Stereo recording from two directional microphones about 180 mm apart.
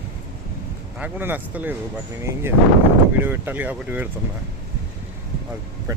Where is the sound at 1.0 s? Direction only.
10° right (ahead or behind).